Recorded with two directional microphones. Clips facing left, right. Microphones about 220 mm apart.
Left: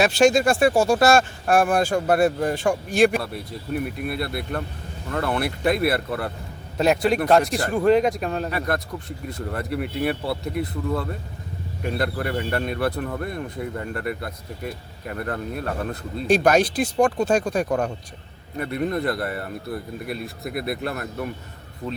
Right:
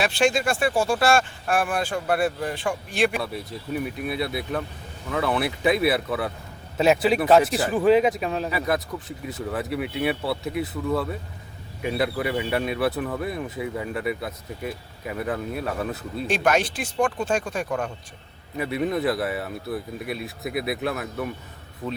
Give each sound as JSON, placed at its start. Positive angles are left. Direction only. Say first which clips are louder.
{"t": 0.0, "sound": "speech", "louder": "left 5 dB", "side_deg": 40}
{"t": 3.2, "sound": "speech", "louder": "left 1 dB", "side_deg": 0}
{"t": 16.2, "sound": "speech", "louder": "left 5 dB", "side_deg": 40}
{"t": 18.5, "sound": "speech", "louder": "even", "side_deg": -5}